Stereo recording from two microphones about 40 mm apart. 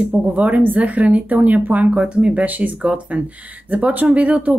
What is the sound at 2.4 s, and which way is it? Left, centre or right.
Speech, right.